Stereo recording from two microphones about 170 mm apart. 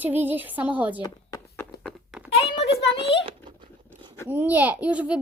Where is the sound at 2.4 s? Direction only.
35° left (ahead or behind).